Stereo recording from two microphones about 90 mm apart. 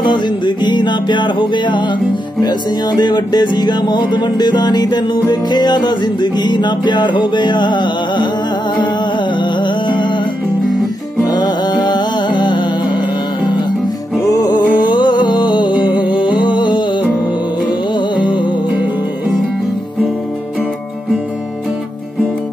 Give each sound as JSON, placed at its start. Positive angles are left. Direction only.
{"t": 0.0, "sound": "music", "side_deg": 55}
{"t": 9.3, "sound": "music", "side_deg": 60}
{"t": 11.2, "sound": "music", "side_deg": 50}
{"t": 14.2, "sound": "music", "side_deg": 45}
{"t": 14.8, "sound": "music", "side_deg": 55}
{"t": 17.9, "sound": "music", "side_deg": 60}